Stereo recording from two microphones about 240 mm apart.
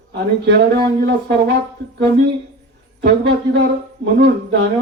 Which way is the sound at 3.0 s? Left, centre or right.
Right.